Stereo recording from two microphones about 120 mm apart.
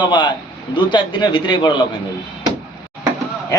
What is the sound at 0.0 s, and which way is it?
A man's voice, 40° left (ahead or behind).